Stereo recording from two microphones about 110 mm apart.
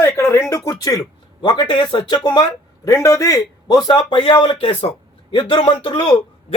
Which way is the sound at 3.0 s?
30° left (ahead or behind).